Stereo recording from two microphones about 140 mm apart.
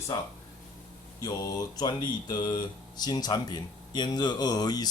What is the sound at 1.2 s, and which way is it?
Speech, 25° left (ahead or behind).